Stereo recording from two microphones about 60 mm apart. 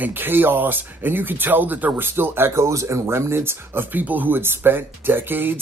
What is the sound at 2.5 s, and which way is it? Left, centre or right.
Speech, right.